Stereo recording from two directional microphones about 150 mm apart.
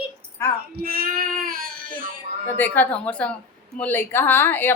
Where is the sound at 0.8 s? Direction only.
75° right (ahead or behind).